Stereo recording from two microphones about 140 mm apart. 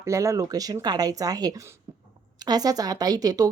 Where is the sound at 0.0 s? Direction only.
20° right (ahead or behind).